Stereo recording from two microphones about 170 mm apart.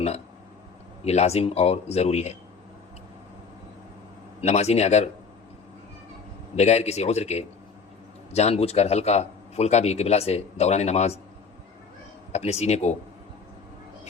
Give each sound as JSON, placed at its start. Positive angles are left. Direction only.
{"t": 1.0, "sound": "a man's voice", "side_deg": 40}
{"t": 4.4, "sound": "a man's voice", "side_deg": 40}
{"t": 6.6, "sound": "a man's voice", "side_deg": 40}
{"t": 12.3, "sound": "a man's voice", "side_deg": 40}